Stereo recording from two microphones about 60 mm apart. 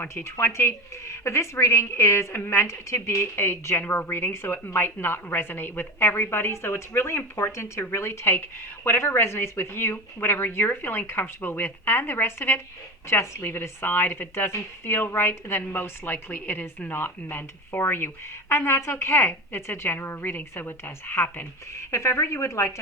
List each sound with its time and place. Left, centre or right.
0.1 s speech: left
4.3 s a woman's voice: left
6.5 s a woman's voice: left
21.8 s speech: left